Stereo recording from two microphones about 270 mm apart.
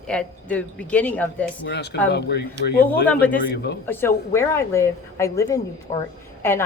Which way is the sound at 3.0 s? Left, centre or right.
Centre.